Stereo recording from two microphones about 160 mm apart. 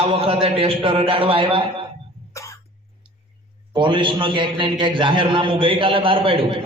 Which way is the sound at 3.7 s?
30° right (ahead or behind).